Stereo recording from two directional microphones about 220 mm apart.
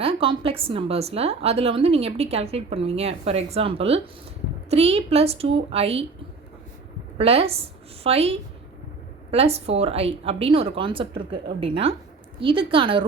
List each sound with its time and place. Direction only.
0.0 s a woman's voice: 25° right (ahead or behind)
7.2 s a woman's voice: 25° right (ahead or behind)